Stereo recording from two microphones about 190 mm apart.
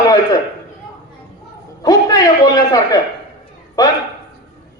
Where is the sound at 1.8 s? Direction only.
20° left (ahead or behind).